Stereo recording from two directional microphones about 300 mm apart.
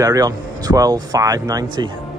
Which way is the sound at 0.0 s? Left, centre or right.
Centre.